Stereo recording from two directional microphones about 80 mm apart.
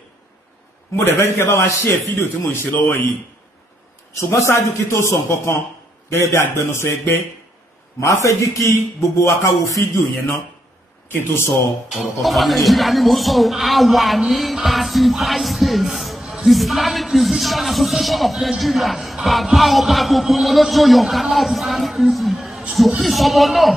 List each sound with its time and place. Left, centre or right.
1.0 s a man's voice: left
4.4 s a man's voice: left
11.9 s speech: centre